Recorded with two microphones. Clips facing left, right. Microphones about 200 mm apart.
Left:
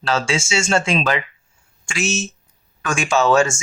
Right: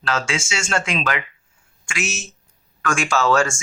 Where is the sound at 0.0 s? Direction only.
30° left (ahead or behind).